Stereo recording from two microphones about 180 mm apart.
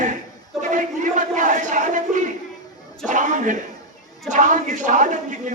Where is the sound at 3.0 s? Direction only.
45° right (ahead or behind).